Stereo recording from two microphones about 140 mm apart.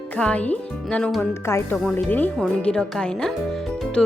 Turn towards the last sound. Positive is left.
turn(degrees=0)  # may be behind; listen again after turning